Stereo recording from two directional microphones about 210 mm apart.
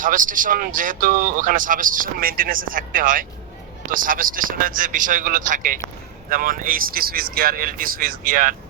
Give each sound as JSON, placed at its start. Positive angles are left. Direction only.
{"t": 0.0, "sound": "speech", "side_deg": -40}